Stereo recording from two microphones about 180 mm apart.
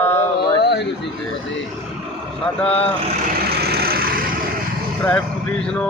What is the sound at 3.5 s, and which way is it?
Vehicle, 60° right (ahead or behind).